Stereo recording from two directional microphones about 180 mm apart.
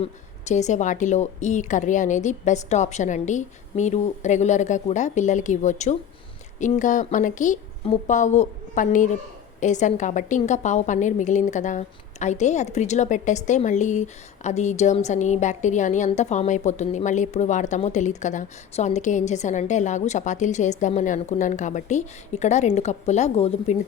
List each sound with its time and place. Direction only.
0.0 s a woman's voice: 40° left (ahead or behind)